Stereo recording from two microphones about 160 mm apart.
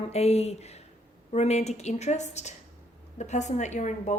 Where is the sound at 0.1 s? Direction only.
40° left (ahead or behind).